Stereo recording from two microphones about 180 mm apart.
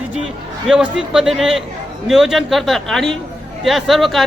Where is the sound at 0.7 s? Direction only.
5° right (ahead or behind).